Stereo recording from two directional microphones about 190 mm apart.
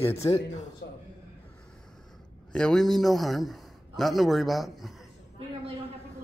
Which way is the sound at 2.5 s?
5° left (ahead or behind).